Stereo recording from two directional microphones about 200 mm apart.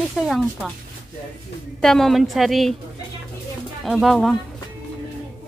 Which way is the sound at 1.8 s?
Centre (ahead or behind).